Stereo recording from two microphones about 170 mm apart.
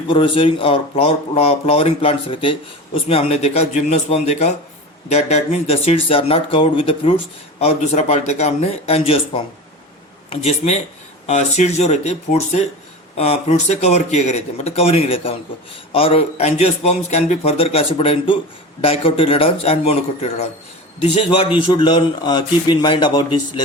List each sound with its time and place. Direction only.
0.1 s a man's voice: 30° left (ahead or behind)